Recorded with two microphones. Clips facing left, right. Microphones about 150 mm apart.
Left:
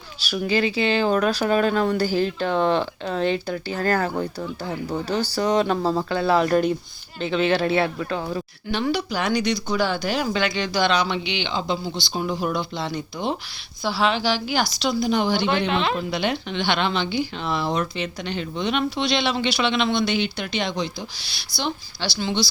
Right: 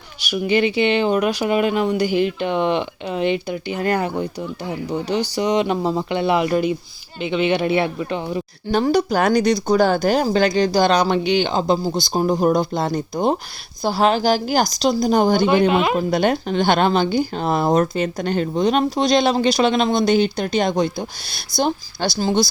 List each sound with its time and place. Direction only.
0.2 s speech: 20° right (ahead or behind)
6.5 s speech: 5° right (ahead or behind)
8.7 s speech: 40° right (ahead or behind)
15.7 s speech: 10° right (ahead or behind)
16.0 s speech: 45° right (ahead or behind)